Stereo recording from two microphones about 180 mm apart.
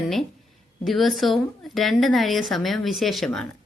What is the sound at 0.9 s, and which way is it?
A woman's voice, centre (ahead or behind).